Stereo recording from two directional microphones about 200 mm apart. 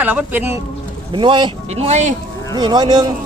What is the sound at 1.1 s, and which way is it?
Speech, 25° right (ahead or behind).